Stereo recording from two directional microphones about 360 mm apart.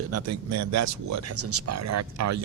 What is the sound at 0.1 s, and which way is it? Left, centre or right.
Speech, right.